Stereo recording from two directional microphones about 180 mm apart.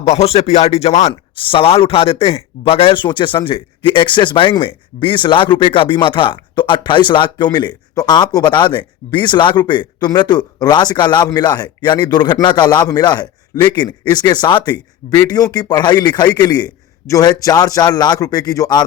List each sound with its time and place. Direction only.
0.1 s speech: 35° left (ahead or behind); by 18.8 s 20° left (ahead or behind)